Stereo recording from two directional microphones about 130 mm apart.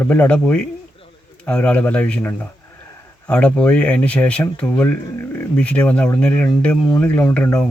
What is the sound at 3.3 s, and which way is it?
Speech, 10° left (ahead or behind).